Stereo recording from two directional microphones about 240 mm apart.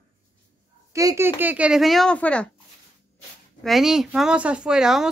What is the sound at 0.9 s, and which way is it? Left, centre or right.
Speech, centre.